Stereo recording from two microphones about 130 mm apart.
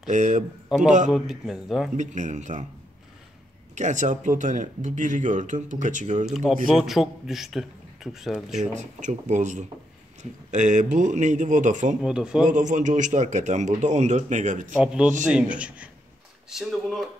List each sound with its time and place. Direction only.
0.1 s speech: 70° right (ahead or behind)
1.1 s a man's voice: 5° right (ahead or behind)
2.0 s speech: 70° right (ahead or behind)
3.7 s speech: 70° right (ahead or behind)
6.2 s a man's voice: 5° right (ahead or behind)
8.7 s speech: 70° right (ahead or behind)
12.0 s a man's voice: 5° right (ahead or behind)
12.4 s speech: 70° right (ahead or behind)
14.8 s a man's voice: 5° right (ahead or behind)